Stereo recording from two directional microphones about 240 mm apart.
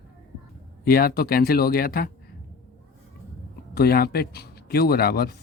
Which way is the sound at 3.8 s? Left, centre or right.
Left.